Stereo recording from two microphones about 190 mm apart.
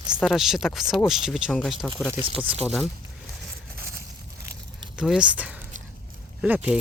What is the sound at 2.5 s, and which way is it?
Speech, 5° right (ahead or behind).